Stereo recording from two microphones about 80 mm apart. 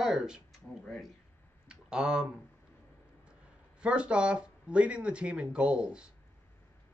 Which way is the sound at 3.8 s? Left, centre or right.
Centre.